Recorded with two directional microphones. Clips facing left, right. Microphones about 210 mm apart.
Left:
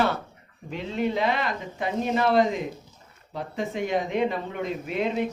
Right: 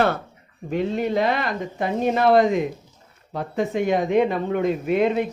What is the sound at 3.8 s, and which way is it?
Speech, 55° right (ahead or behind).